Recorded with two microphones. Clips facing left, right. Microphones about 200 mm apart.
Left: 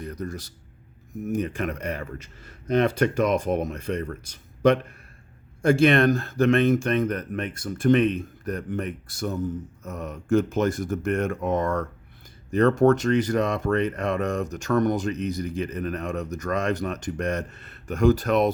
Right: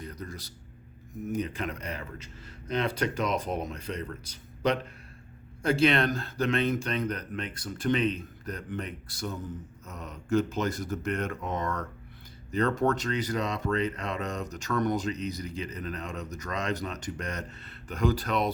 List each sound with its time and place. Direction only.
0.0 s a sound: 50° left (ahead or behind)
1.3 s speech: 50° left (ahead or behind)
5.6 s speech: 50° left (ahead or behind)